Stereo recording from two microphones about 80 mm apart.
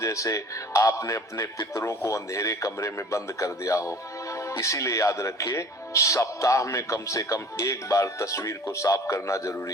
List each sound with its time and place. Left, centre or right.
0.0 s speech: left